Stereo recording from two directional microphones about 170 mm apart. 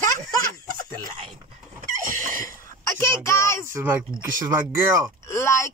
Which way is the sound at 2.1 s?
55° right (ahead or behind).